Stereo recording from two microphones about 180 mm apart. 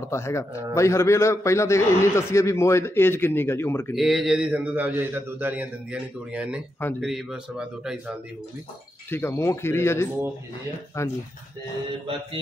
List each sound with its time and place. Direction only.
0.0 s a man's voice: 15° left (ahead or behind)
3.9 s a man's voice: centre (ahead or behind)
9.1 s a man's voice: 15° left (ahead or behind)